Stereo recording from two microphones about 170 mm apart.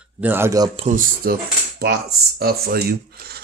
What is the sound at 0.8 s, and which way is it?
Speech, 50° right (ahead or behind).